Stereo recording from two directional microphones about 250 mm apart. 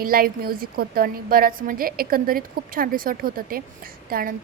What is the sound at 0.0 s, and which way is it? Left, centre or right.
A woman's voice, right.